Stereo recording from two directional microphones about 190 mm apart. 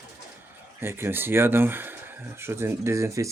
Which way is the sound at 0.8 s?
10° right (ahead or behind).